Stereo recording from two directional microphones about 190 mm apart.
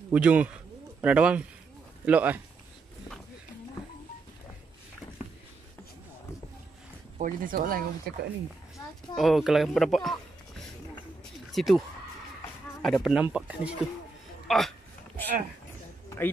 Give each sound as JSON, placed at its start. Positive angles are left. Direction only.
{"t": 0.1, "sound": "speech", "side_deg": -5}
{"t": 7.2, "sound": "speech", "side_deg": -45}
{"t": 9.1, "sound": "speech", "side_deg": 0}
{"t": 11.5, "sound": "speech", "side_deg": 0}
{"t": 12.8, "sound": "speech", "side_deg": 0}